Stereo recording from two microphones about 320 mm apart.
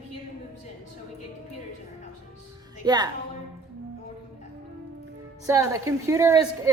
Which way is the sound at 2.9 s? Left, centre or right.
Centre.